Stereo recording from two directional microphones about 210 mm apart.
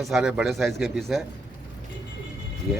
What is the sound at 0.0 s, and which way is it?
Speech, centre (ahead or behind).